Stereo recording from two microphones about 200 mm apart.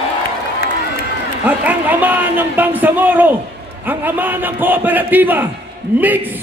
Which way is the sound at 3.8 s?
10° right (ahead or behind).